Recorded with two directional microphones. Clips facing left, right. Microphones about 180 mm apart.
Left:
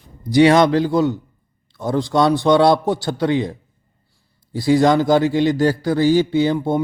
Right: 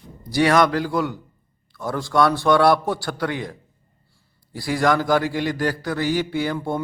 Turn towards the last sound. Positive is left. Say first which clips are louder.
# left 7 dB
turn(degrees=20)  # may be behind; listen again after turning